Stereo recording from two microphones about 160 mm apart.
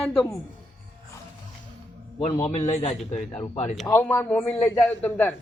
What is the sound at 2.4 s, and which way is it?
Speech, 45° left (ahead or behind).